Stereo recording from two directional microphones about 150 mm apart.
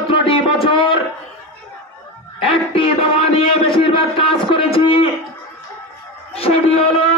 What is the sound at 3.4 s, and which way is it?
A man's voice, 35° left (ahead or behind).